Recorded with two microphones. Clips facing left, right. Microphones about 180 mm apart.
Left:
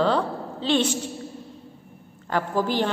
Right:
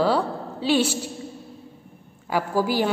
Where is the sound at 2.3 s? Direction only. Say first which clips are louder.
Right 1 dB; 10° right (ahead or behind).